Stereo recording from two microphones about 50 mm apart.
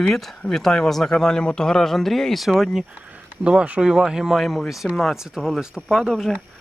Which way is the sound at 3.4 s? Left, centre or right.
Right.